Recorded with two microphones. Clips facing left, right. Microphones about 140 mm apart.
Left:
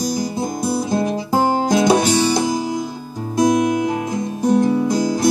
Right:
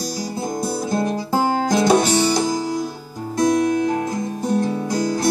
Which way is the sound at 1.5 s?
15° left (ahead or behind).